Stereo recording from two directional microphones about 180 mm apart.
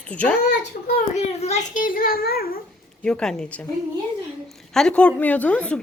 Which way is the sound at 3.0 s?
5° left (ahead or behind).